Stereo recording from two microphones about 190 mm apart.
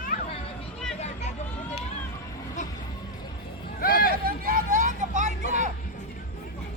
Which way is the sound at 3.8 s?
50° left (ahead or behind).